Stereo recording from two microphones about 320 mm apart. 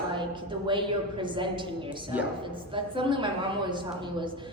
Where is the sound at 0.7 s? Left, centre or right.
Centre.